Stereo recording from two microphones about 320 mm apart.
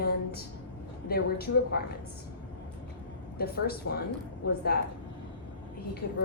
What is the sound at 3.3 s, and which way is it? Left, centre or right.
Speech, left.